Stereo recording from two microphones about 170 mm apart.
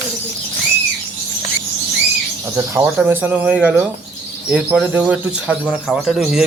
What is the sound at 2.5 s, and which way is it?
Speech, 15° right (ahead or behind).